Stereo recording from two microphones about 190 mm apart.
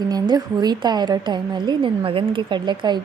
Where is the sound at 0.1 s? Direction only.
20° right (ahead or behind).